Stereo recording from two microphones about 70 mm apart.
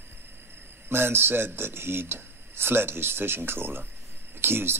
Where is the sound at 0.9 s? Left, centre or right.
Right.